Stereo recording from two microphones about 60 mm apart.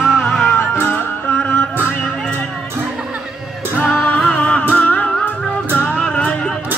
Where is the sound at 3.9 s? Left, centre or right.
Left.